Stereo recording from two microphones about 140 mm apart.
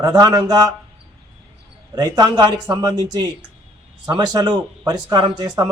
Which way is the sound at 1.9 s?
30° right (ahead or behind).